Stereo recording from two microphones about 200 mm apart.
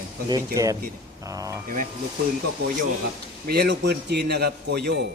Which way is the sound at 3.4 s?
55° right (ahead or behind).